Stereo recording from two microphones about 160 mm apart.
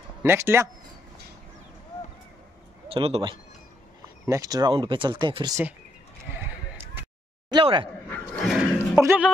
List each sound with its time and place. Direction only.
0.2 s speech: 15° right (ahead or behind)
2.9 s speech: 35° right (ahead or behind)
7.5 s speech: 30° right (ahead or behind)
8.5 s a sound: 5° right (ahead or behind)
9.0 s speech: 15° right (ahead or behind)